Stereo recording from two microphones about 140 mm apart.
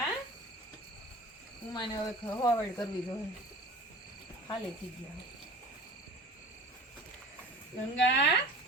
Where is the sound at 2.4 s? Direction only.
30° left (ahead or behind).